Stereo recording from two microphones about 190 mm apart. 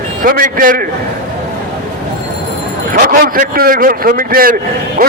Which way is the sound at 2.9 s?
45° right (ahead or behind).